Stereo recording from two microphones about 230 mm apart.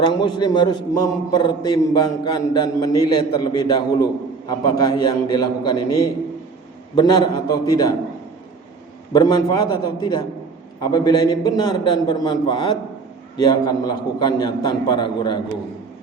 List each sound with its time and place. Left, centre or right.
0.0 s a man's voice: centre
9.1 s a man's voice: centre